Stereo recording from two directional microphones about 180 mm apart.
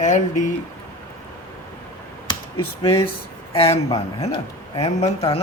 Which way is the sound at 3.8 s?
30° left (ahead or behind).